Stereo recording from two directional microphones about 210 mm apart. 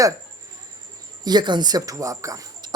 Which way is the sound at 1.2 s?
20° right (ahead or behind).